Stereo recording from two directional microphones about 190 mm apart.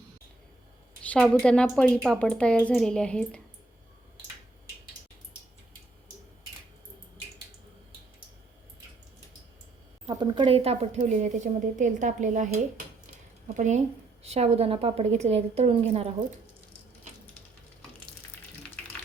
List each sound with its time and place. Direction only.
1.0 s a woman's voice: 5° left (ahead or behind)
10.1 s a woman's voice: 25° right (ahead or behind); by 12.5 s 40° right (ahead or behind)
13.5 s a woman's voice: 40° right (ahead or behind)